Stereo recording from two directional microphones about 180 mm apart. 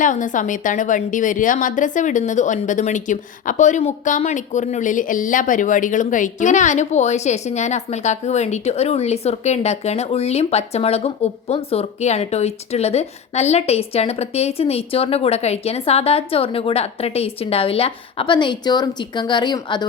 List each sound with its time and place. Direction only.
0.0 s a woman's voice: 45° left (ahead or behind); by 19.9 s 25° left (ahead or behind)